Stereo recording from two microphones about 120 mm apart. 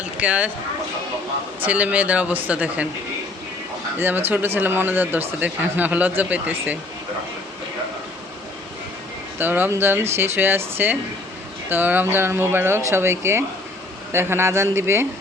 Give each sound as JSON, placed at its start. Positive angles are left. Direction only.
{"t": 0.2, "sound": "speech", "side_deg": -10}
{"t": 1.6, "sound": "speech", "side_deg": -10}
{"t": 4.0, "sound": "speech", "side_deg": -15}
{"t": 9.4, "sound": "speech", "side_deg": -15}